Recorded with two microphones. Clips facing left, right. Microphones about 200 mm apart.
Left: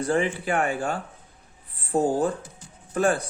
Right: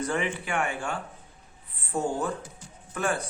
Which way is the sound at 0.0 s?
35° left (ahead or behind).